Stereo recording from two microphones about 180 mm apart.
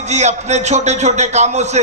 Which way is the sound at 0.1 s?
40° right (ahead or behind).